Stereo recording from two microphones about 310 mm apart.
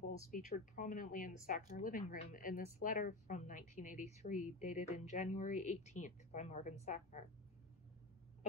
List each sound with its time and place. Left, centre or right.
0.3 s speech: left